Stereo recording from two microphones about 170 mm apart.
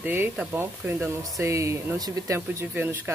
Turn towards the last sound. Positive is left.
turn(degrees=-15)  # may be behind; listen again after turning